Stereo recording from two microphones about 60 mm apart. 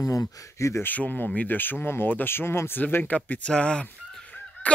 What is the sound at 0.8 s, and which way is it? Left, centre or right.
Speech, left.